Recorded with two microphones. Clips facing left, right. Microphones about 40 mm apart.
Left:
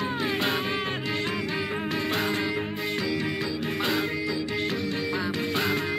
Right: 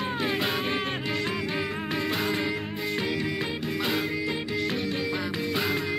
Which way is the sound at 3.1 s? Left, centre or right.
Centre.